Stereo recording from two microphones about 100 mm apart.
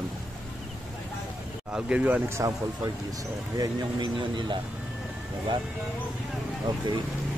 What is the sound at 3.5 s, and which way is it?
Speech, 45° right (ahead or behind).